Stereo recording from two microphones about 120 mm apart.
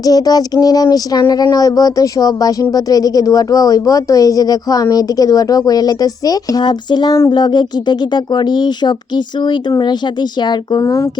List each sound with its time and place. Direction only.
0.0 s speech: 30° left (ahead or behind)